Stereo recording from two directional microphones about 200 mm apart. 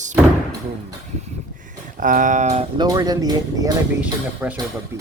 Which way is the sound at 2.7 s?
20° right (ahead or behind).